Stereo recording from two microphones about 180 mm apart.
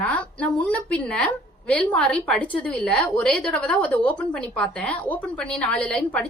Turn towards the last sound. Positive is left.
turn(degrees=10)  # may be behind; listen again after turning